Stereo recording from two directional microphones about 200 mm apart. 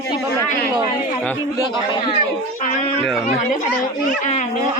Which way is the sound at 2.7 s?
35° left (ahead or behind).